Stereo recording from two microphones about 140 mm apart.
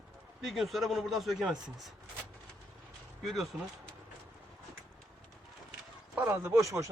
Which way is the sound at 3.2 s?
Centre (ahead or behind).